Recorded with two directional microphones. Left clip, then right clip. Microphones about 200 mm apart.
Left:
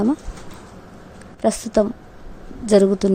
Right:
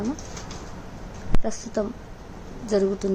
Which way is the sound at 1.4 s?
45° left (ahead or behind).